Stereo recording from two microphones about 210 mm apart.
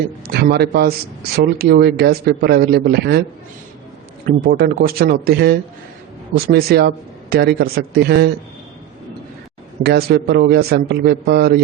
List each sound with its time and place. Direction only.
0.3 s speech: 50° right (ahead or behind)
4.3 s speech: 45° right (ahead or behind)
9.8 s speech: 50° right (ahead or behind)